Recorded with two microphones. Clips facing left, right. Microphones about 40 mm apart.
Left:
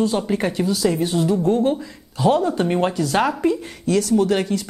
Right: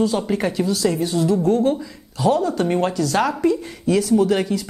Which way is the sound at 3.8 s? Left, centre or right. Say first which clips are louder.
Right 1 dB; centre.